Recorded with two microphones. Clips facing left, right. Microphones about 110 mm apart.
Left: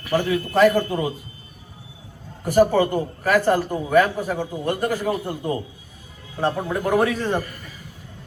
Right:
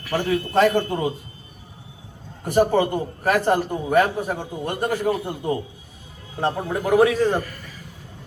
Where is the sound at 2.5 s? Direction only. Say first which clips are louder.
Left 2 dB; 25° right (ahead or behind).